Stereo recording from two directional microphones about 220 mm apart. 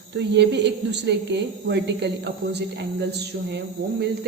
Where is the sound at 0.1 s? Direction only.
50° right (ahead or behind).